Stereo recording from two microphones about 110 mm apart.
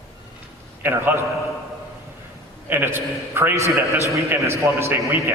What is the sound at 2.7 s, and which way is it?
A man's voice, 20° right (ahead or behind).